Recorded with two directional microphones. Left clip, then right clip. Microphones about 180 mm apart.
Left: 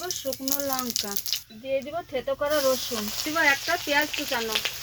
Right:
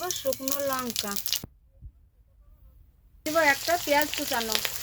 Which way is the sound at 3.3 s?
30° right (ahead or behind).